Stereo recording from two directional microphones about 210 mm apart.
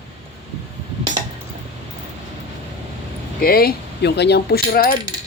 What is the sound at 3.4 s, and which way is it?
Coin, 45° left (ahead or behind).